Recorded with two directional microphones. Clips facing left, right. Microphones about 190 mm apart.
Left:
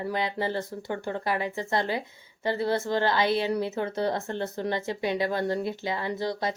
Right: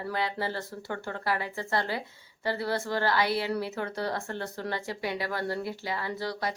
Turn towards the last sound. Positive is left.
turn(degrees=20)  # may be behind; listen again after turning